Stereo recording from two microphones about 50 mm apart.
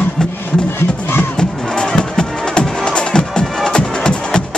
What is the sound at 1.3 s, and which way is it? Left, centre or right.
Music, centre.